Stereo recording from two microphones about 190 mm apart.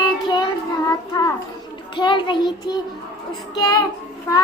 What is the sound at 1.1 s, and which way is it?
Child singing, 20° left (ahead or behind).